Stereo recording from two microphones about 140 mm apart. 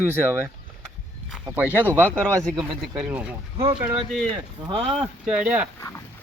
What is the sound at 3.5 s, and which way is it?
Speech, 40° right (ahead or behind).